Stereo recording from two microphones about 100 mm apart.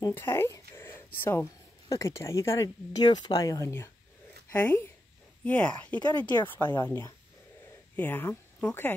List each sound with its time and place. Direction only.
0.1 s a woman's voice: 25° left (ahead or behind)
4.5 s a woman's voice: 20° left (ahead or behind)